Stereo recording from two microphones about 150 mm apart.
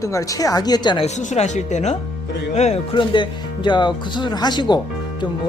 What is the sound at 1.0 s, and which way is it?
Speech, 50° left (ahead or behind).